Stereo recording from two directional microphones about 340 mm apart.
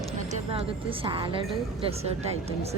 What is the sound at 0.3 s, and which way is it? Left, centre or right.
A woman's voice, centre.